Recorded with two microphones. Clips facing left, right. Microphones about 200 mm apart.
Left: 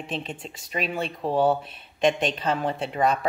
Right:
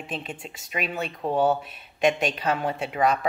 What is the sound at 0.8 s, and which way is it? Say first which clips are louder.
Speech: left 2 dB; 30° left (ahead or behind).